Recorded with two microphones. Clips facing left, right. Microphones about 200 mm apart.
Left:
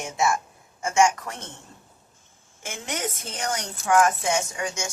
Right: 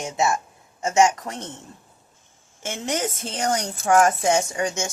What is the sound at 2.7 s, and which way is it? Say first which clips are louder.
A woman's voice: right 5 dB; 30° right (ahead or behind).